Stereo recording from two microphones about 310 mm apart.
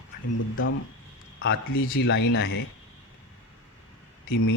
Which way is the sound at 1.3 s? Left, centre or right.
Left.